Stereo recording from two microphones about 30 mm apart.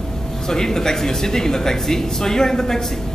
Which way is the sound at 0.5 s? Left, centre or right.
Centre.